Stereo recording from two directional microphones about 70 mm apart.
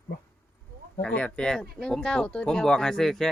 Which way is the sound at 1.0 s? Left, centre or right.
Centre.